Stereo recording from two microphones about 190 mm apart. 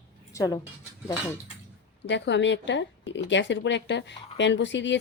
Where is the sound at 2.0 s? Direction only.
70° left (ahead or behind).